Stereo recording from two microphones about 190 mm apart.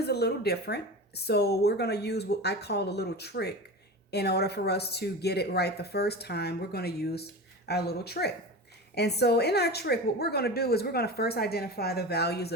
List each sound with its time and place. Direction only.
0.0 s a woman's voice: 60° left (ahead or behind)